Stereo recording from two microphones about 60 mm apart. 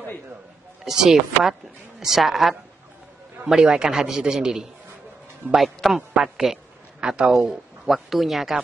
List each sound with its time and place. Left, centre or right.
0.8 s a man's voice: centre